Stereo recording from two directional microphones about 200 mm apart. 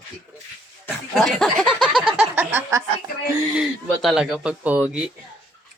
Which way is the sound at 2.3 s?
10° right (ahead or behind).